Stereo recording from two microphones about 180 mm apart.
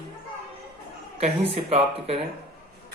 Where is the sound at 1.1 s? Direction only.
35° right (ahead or behind).